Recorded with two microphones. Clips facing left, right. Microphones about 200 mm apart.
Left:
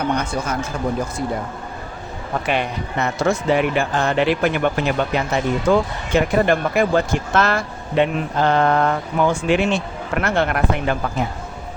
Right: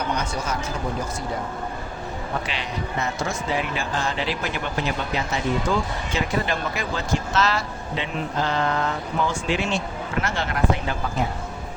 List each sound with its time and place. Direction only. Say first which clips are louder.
2.5 s a man's voice: left 7 dB; 60° left (ahead or behind)